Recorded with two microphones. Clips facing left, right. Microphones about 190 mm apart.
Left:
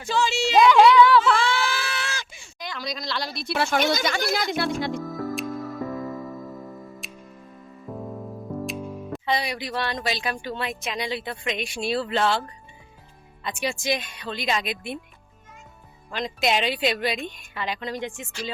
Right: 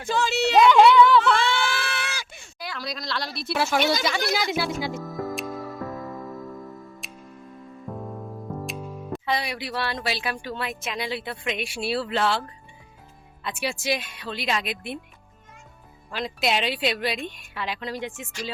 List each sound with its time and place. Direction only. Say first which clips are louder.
0.0 s speech: even; 55° right (ahead or behind)
0.7 s a sound: left 1 dB; centre (ahead or behind)
2.4 s speech: left 1 dB; 5° right (ahead or behind)
7.0 s music: left 1 dB; centre (ahead or behind)
9.1 s speech: left 1 dB; centre (ahead or behind)
16.0 s speech: left 1 dB; 5° right (ahead or behind)